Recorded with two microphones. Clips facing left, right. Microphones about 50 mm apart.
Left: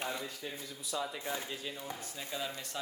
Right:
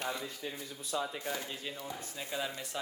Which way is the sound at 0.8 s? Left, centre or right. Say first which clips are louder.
Right 2 dB; right.